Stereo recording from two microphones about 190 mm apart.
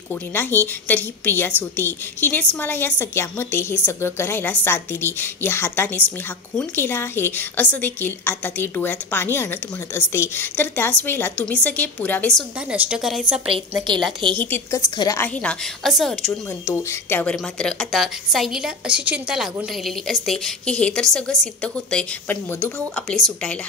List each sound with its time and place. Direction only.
0.1 s a woman's voice: 10° left (ahead or behind)
12.7 s a woman's voice: 5° right (ahead or behind)
13.5 s a woman's voice: 25° right (ahead or behind)
14.3 s a woman's voice: 10° left (ahead or behind)
16.6 s a woman's voice: 15° left (ahead or behind)